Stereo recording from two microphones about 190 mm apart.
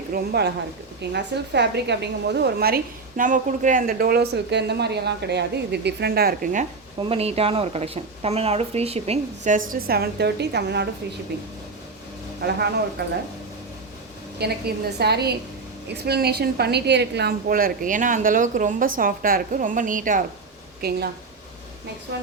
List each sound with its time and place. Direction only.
0.1 s a woman's voice: 55° right (ahead or behind)
7.0 s a woman's voice: 30° right (ahead or behind)
9.6 s a woman's voice: 50° right (ahead or behind)
12.4 s a woman's voice: 60° right (ahead or behind)
14.3 s a woman's voice: 60° right (ahead or behind)